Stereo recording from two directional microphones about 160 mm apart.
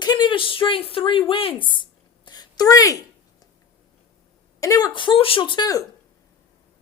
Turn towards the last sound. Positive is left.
turn(degrees=25)  # may be behind; listen again after turning